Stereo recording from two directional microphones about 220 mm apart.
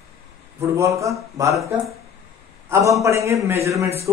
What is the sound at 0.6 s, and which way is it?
Speech, 15° right (ahead or behind).